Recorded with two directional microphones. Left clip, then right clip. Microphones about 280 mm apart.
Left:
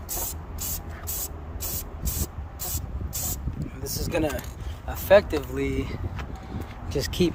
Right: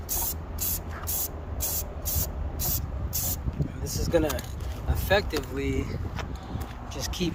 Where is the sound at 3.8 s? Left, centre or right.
Left.